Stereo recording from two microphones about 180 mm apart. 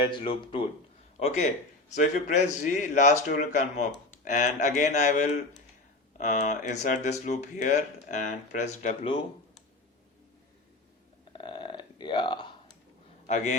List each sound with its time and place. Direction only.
0.0 s a man's voice: 25° left (ahead or behind)
11.3 s a sound: 25° left (ahead or behind)
13.2 s a man's voice: 40° left (ahead or behind)